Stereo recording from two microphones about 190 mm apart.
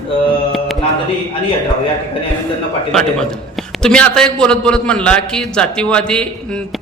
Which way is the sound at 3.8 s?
5° left (ahead or behind).